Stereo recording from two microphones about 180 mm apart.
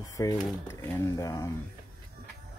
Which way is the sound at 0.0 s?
20° left (ahead or behind).